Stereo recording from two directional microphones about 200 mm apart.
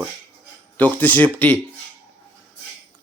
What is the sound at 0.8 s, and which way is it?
Speech, 10° left (ahead or behind).